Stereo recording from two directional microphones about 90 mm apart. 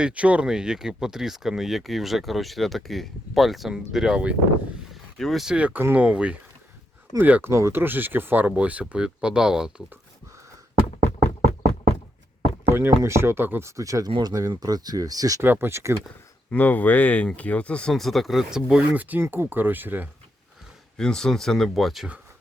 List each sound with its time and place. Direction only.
0.0 s speech: 15° right (ahead or behind)
4.9 s a sound: centre (ahead or behind)
5.5 s speech: 15° right (ahead or behind)
12.7 s speech: 30° right (ahead or behind); by 15.4 s 45° right (ahead or behind)
15.4 s speech: 25° right (ahead or behind)
16.5 s speech: 20° left (ahead or behind); by 18.8 s 5° right (ahead or behind)
18.8 s speech: 20° right (ahead or behind)
21.0 s speech: 5° left (ahead or behind)